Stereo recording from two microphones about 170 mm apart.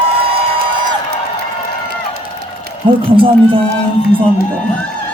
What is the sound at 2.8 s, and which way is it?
Speech, 30° right (ahead or behind).